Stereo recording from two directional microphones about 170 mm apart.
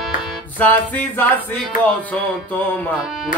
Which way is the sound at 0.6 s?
10° left (ahead or behind).